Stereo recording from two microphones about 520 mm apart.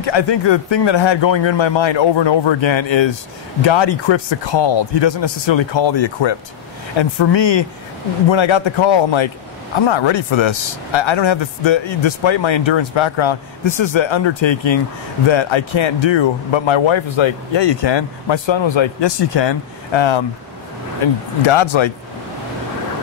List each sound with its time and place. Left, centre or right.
0.0 s speech: left